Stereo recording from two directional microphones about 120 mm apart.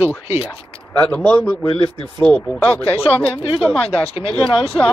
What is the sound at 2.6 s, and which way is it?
Speech, 20° left (ahead or behind).